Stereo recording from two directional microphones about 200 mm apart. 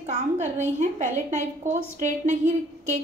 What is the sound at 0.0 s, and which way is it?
A woman's voice, 35° right (ahead or behind).